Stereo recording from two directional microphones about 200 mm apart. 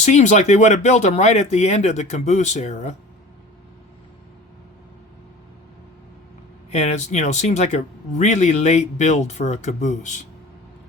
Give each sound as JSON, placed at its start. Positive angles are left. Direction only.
{"t": 0.0, "sound": "speech", "side_deg": 35}
{"t": 6.7, "sound": "speech", "side_deg": 35}